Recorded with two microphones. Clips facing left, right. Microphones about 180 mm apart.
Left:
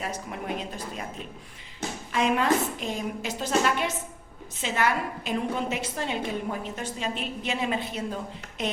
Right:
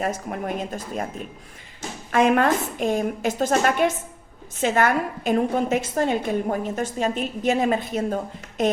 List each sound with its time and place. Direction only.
0.0 s a woman's voice: 50° right (ahead or behind)
2.1 s a woman's voice: 55° right (ahead or behind)